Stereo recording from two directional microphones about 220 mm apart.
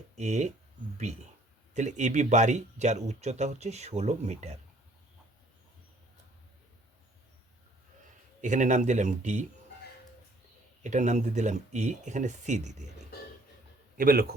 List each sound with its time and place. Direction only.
0.2 s speech: 30° right (ahead or behind)
1.7 s speech: 35° right (ahead or behind)
8.4 s speech: 35° right (ahead or behind)
10.8 s speech: 35° right (ahead or behind)
13.9 s a man's voice: 40° right (ahead or behind)